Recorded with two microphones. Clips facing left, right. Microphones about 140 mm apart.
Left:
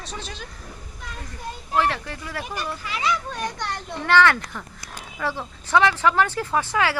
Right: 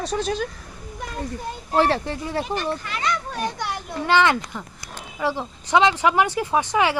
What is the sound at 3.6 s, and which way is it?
Speech, 10° right (ahead or behind).